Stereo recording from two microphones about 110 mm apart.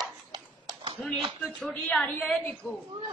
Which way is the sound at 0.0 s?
35° right (ahead or behind).